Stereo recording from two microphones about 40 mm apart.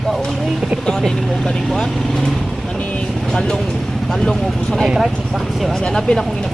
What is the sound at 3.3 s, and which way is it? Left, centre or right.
Speech, centre.